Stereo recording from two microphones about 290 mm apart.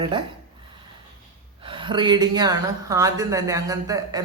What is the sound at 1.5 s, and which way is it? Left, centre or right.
A woman's voice, centre.